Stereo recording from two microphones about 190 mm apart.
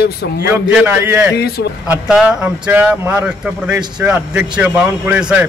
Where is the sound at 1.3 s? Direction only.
60° left (ahead or behind).